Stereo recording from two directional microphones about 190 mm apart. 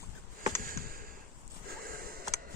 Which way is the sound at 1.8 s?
50° right (ahead or behind).